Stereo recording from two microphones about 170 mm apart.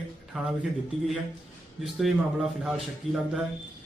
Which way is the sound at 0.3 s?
5° right (ahead or behind).